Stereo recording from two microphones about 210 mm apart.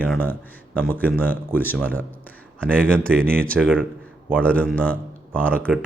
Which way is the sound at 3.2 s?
45° right (ahead or behind).